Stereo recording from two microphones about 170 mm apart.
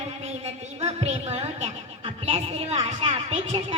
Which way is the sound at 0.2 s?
40° right (ahead or behind).